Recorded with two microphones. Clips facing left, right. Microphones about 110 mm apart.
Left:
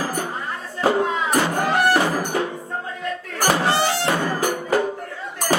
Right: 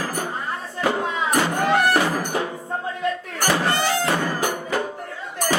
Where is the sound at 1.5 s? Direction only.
35° left (ahead or behind).